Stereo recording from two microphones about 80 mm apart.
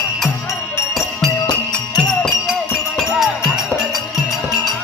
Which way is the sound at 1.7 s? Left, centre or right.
Centre.